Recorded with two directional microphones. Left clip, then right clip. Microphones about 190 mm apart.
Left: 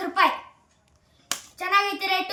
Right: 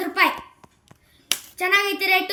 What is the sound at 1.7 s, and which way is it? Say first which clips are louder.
Speech: right 2 dB; 30° left (ahead or behind).